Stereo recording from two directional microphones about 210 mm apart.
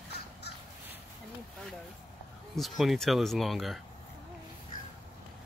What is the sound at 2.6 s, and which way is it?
Speech, centre (ahead or behind).